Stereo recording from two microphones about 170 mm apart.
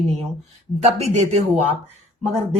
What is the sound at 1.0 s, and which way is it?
Speech, 40° right (ahead or behind).